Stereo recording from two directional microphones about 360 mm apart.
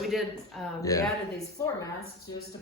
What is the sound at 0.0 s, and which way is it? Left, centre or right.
A woman's voice, centre.